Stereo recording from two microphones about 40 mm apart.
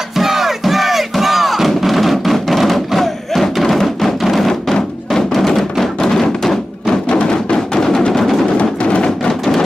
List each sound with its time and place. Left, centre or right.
0.1 s crowd: centre
5.1 s music: centre
8.5 s music: left